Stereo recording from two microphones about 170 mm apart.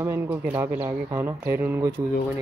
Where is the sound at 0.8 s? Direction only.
25° right (ahead or behind).